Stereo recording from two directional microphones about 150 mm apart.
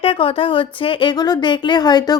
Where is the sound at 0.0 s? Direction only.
35° left (ahead or behind).